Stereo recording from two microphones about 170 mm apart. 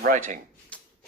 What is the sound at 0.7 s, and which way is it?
Rub, 10° left (ahead or behind).